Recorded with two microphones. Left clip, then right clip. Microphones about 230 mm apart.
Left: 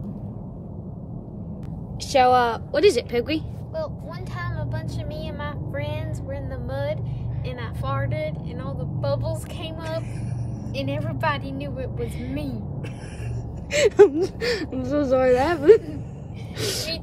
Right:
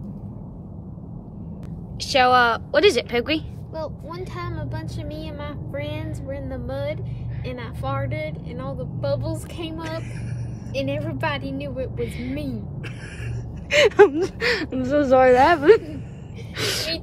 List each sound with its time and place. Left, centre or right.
2.0 s speech: centre
4.4 s vehicle: right
7.4 s speech: right
13.7 s speech: centre